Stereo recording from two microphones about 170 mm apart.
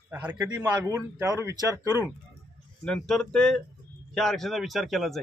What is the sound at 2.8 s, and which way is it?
A man's voice, 5° left (ahead or behind).